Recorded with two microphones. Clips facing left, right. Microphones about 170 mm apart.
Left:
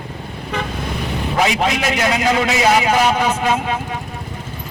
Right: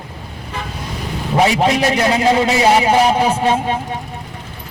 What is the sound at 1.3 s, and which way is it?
A man's voice, 35° right (ahead or behind).